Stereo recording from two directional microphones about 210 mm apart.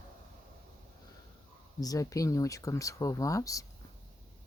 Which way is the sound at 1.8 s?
15° left (ahead or behind).